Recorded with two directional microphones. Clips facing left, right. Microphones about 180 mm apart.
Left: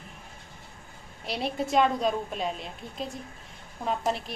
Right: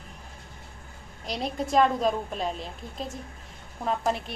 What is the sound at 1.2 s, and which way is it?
A woman's voice, 5° left (ahead or behind).